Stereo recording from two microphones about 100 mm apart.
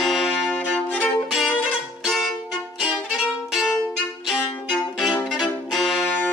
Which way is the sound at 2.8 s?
5° right (ahead or behind).